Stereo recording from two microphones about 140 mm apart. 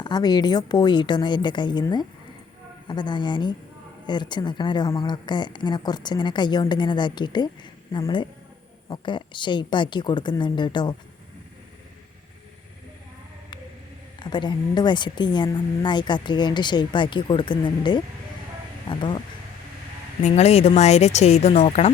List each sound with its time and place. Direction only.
0.0 s a woman's voice: 30° left (ahead or behind)
14.2 s a woman's voice: 30° left (ahead or behind)
20.2 s speech: 50° left (ahead or behind)